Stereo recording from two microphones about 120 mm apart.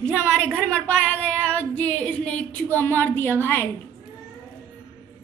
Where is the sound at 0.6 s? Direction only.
10° left (ahead or behind).